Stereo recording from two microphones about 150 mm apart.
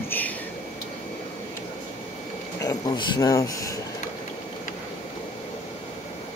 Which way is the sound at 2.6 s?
25° left (ahead or behind).